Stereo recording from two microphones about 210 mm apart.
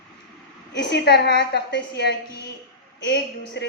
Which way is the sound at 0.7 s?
55° left (ahead or behind).